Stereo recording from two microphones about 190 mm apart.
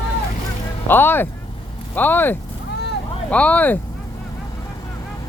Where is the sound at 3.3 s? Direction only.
5° left (ahead or behind).